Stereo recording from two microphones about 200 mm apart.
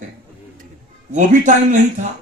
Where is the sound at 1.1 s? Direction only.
40° right (ahead or behind).